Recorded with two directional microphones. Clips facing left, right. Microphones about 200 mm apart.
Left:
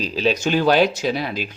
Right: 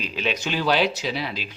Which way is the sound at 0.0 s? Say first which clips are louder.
Left 7 dB; 35° left (ahead or behind).